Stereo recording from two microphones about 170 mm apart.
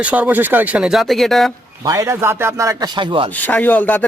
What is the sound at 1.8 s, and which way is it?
Speech, 15° right (ahead or behind).